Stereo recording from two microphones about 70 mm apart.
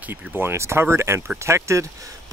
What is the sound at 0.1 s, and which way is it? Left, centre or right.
Speech, right.